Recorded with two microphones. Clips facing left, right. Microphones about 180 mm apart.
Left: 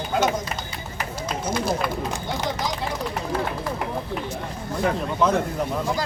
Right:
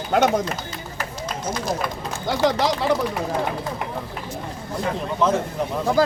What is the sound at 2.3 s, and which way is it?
Speech, 90° right.